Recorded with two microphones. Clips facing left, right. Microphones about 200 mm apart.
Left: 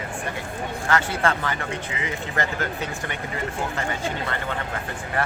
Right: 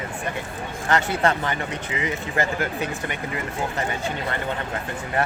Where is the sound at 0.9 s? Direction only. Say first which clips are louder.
Right 2 dB; 20° right (ahead or behind).